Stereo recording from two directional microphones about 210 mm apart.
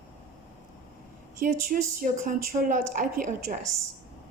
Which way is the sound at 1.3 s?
40° right (ahead or behind).